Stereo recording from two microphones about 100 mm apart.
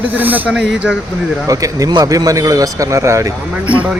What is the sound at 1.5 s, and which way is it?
A man's voice, 35° right (ahead or behind).